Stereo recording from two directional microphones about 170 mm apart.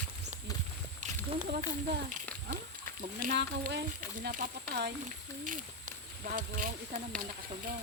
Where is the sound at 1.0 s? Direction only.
45° right (ahead or behind).